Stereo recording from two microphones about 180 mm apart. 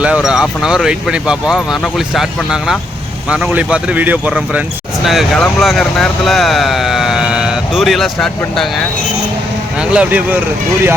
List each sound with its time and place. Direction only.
0.0 s speech: 5° right (ahead or behind)
9.9 s speech: 5° right (ahead or behind)